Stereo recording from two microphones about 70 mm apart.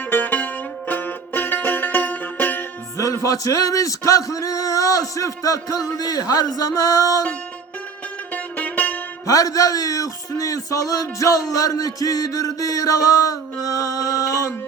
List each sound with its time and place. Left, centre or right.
0.1 s music: left
3.0 s speech: left
8.3 s music: left
9.2 s speech: left